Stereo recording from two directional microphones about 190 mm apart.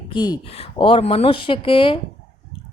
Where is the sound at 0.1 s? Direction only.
25° left (ahead or behind).